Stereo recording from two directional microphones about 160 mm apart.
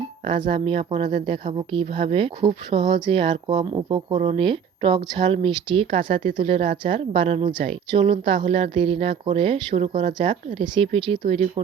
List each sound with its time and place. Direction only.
0.3 s speech: 30° right (ahead or behind)